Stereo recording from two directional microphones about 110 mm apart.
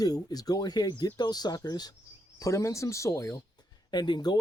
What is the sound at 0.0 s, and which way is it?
Speech, 35° left (ahead or behind).